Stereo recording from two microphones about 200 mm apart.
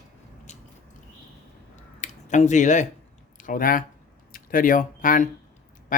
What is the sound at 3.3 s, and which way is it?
Speech, 40° left (ahead or behind).